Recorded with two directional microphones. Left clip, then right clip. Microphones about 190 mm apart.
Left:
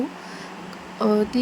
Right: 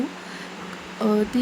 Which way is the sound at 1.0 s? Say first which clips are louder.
Left 2 dB; 20° left (ahead or behind).